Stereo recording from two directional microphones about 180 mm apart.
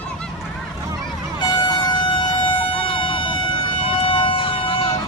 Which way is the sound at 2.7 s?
30° left (ahead or behind).